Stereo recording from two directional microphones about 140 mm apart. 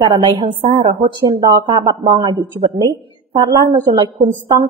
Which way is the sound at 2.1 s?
30° right (ahead or behind).